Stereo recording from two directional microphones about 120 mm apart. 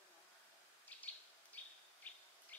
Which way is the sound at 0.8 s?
15° left (ahead or behind).